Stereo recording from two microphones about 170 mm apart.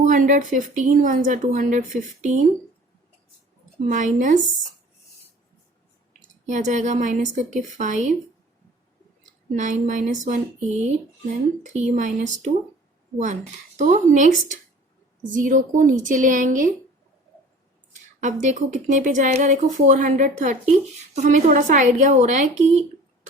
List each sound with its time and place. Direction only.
0.0 s speech: 50° right (ahead or behind)
3.8 s speech: 45° right (ahead or behind)
6.5 s speech: 45° right (ahead or behind)
9.2 s speech: 45° right (ahead or behind)
18.2 s speech: 45° right (ahead or behind)